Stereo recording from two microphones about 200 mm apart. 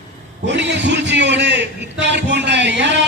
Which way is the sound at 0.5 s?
60° right (ahead or behind).